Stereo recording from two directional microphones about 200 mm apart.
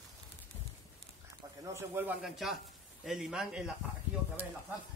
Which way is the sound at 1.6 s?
10° right (ahead or behind).